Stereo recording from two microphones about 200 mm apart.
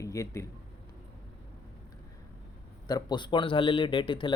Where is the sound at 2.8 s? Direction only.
20° left (ahead or behind).